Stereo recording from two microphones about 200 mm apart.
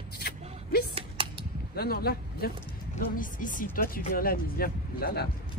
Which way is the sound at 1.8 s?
50° left (ahead or behind).